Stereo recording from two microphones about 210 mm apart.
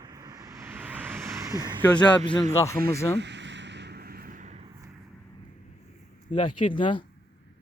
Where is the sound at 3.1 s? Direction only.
55° right (ahead or behind).